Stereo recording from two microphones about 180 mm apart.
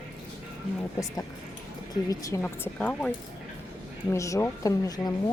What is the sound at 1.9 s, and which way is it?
Speech, 20° left (ahead or behind).